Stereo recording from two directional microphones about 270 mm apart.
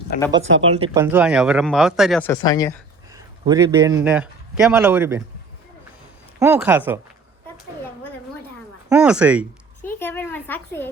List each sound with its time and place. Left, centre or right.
0.1 s speech: left
0.8 s speech: centre
2.3 s speech: centre
3.4 s a man's voice: centre
6.4 s a man's voice: centre
8.9 s speech: centre
10.0 s a woman's voice: centre